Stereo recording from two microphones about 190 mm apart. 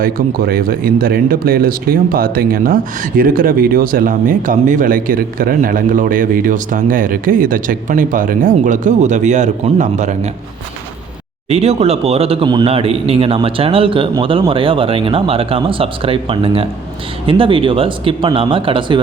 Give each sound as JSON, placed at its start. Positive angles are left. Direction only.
{"t": 0.0, "sound": "speech", "side_deg": -50}
{"t": 11.4, "sound": "speech", "side_deg": -35}